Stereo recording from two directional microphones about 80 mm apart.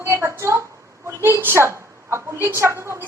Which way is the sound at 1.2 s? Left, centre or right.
Right.